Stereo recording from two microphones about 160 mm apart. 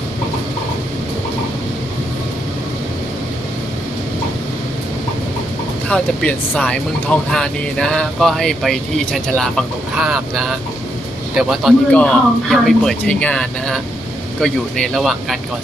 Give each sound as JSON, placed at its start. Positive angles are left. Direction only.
{"t": 5.9, "sound": "speech", "side_deg": 5}